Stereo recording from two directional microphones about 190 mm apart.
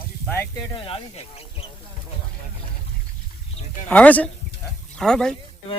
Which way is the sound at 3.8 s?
5° left (ahead or behind).